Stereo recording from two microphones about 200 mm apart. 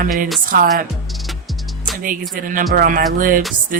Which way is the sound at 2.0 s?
45° right (ahead or behind).